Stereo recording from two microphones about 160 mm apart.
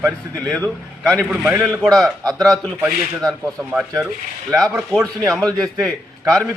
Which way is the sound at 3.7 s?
10° right (ahead or behind).